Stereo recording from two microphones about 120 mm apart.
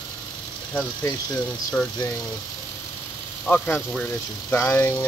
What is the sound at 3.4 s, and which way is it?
Speech, 15° left (ahead or behind).